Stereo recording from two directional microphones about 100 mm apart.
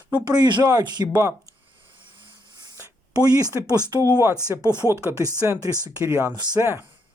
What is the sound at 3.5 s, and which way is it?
Speech, 40° right (ahead or behind).